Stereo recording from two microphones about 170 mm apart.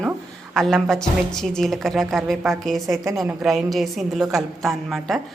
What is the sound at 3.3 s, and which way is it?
A woman's voice, centre (ahead or behind).